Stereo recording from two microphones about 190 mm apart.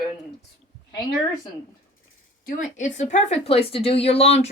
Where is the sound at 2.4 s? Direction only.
40° left (ahead or behind).